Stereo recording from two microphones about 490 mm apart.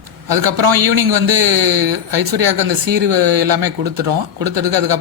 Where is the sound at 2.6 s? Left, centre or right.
Right.